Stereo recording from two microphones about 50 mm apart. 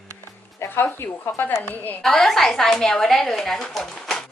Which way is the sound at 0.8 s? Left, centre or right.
Left.